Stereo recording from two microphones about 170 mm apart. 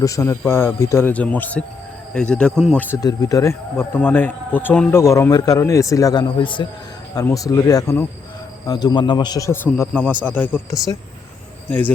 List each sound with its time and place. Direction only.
0.0 s speech: 20° left (ahead or behind)
3.0 s a man's voice: 20° left (ahead or behind)